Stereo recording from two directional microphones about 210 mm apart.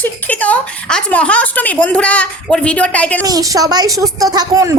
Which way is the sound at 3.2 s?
15° right (ahead or behind).